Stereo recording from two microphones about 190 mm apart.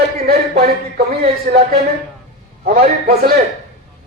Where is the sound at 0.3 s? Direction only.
55° right (ahead or behind).